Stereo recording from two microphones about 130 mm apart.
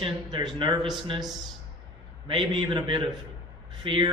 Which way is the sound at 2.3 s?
35° right (ahead or behind).